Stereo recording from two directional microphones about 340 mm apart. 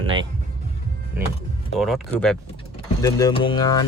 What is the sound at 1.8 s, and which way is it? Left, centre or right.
Speech, centre.